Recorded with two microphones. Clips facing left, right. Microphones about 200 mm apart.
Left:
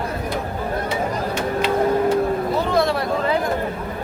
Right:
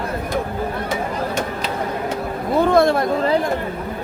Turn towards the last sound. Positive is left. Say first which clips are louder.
# right 4 dB
turn(degrees=-50)  # may be behind; listen again after turning